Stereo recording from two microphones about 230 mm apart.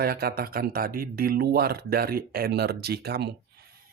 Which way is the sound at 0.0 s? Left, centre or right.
Right.